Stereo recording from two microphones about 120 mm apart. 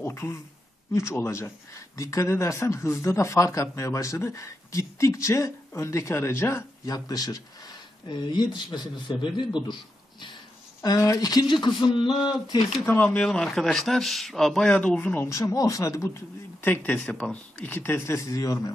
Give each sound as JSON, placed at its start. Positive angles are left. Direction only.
{"t": 0.0, "sound": "speech", "side_deg": 25}
{"t": 10.8, "sound": "speech", "side_deg": 30}
{"t": 12.1, "sound": "speech", "side_deg": -5}
{"t": 12.8, "sound": "speech", "side_deg": 15}
{"t": 16.6, "sound": "speech", "side_deg": 15}